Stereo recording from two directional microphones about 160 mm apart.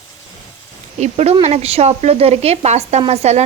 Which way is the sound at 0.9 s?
40° right (ahead or behind).